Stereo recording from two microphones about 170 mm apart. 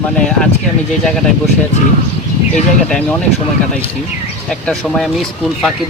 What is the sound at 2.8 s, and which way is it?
Speech, 5° left (ahead or behind).